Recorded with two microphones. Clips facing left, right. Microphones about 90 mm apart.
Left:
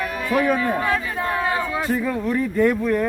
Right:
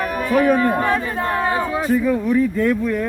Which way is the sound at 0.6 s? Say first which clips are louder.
Right 4 dB; 40° right (ahead or behind).